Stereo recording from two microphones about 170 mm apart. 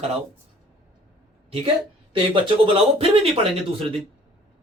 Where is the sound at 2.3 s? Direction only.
30° right (ahead or behind).